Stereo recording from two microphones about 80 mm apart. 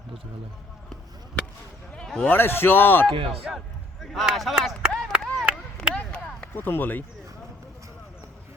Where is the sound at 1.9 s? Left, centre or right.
Centre.